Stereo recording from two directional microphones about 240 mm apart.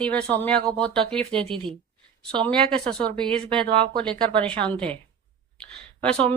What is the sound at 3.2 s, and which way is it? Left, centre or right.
Speech, centre.